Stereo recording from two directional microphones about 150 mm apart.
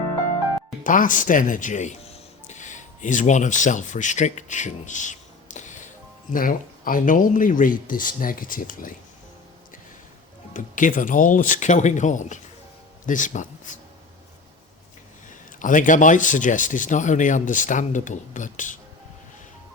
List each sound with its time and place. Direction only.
0.9 s speech: 65° left (ahead or behind)
5.5 s music: 55° left (ahead or behind)
6.3 s speech: 70° left (ahead or behind)
10.5 s speech: 60° left (ahead or behind)
15.5 s speech: 60° left (ahead or behind)